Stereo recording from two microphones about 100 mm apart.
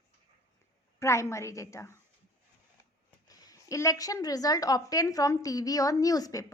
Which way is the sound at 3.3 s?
35° left (ahead or behind).